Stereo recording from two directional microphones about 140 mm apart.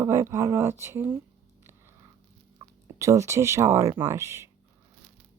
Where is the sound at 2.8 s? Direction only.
20° right (ahead or behind).